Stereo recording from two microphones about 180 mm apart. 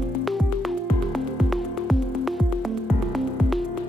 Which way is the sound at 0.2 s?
Centre (ahead or behind).